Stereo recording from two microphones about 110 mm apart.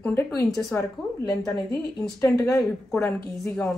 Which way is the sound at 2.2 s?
30° left (ahead or behind).